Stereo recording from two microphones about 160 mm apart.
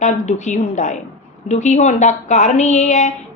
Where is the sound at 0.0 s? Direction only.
45° left (ahead or behind).